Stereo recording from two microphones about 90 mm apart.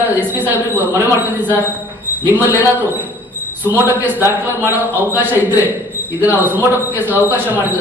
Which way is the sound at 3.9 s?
20° right (ahead or behind).